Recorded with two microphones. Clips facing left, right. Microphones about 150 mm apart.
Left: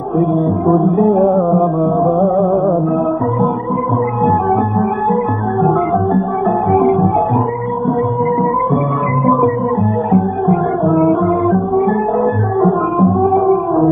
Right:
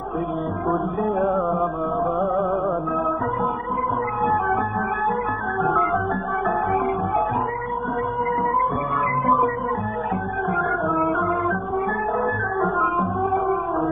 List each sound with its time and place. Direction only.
0.9 s music: 30° left (ahead or behind)
4.7 s music: 30° left (ahead or behind)
10.1 s music: 30° left (ahead or behind)